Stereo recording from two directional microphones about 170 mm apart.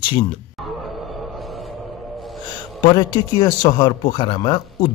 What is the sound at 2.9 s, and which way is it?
Speech, 25° left (ahead or behind).